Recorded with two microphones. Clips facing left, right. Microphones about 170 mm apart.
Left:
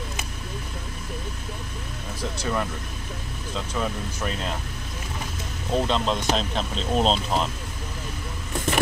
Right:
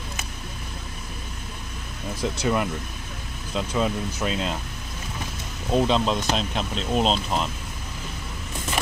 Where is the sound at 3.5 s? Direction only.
15° right (ahead or behind).